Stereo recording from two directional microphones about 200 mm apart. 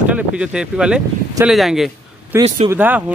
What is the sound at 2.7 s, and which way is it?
Speech, 10° right (ahead or behind).